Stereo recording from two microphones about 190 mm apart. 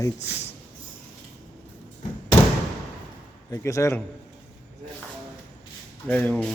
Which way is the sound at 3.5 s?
15° left (ahead or behind).